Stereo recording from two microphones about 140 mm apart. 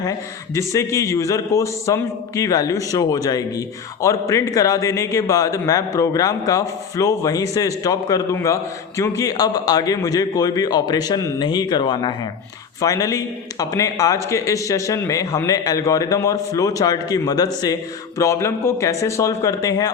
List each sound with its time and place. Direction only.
0.7 s a man's voice: 20° left (ahead or behind)